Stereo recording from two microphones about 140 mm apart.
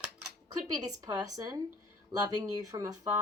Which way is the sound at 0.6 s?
25° right (ahead or behind).